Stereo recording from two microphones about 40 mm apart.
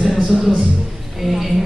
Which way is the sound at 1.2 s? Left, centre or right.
Centre.